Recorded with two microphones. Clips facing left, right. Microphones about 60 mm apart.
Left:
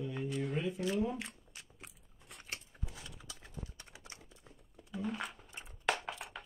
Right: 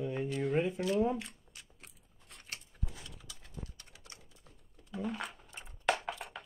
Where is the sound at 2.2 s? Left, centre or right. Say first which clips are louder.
Left 1 dB; centre; by 4.5 s left.